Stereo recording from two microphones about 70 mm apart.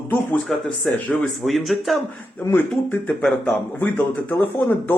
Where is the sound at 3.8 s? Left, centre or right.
Left.